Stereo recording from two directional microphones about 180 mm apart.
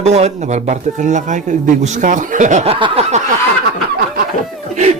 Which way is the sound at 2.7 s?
30° right (ahead or behind).